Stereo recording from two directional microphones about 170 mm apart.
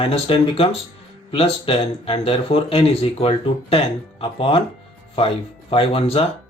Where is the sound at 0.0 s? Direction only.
35° left (ahead or behind).